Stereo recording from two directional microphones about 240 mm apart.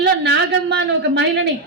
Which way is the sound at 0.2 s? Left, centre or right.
Right.